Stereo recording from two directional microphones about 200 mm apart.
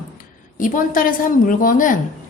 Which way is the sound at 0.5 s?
40° left (ahead or behind).